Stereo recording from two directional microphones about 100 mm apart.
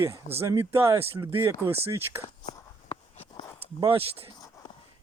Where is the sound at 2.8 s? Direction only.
70° left (ahead or behind).